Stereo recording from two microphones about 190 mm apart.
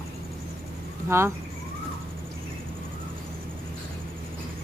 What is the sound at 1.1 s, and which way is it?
Speech, 15° right (ahead or behind).